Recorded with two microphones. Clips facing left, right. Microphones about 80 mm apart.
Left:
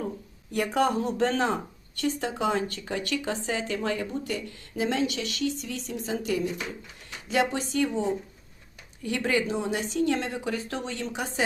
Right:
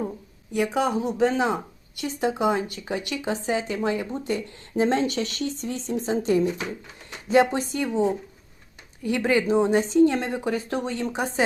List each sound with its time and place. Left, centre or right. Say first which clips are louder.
0.5 s a woman's voice: right 1 dB; centre; by 11.4 s right